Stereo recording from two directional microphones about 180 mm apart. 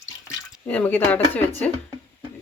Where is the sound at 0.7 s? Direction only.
10° left (ahead or behind).